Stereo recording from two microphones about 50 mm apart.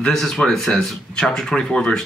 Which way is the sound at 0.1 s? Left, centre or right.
Centre.